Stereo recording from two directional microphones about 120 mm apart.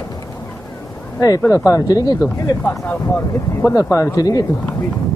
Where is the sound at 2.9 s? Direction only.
20° left (ahead or behind).